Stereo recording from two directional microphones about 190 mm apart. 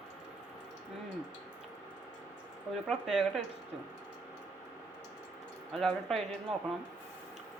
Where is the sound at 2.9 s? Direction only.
Centre (ahead or behind).